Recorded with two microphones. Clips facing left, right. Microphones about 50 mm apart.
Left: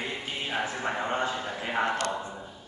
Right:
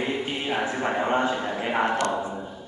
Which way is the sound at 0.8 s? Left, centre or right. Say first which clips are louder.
Right 7 dB; right.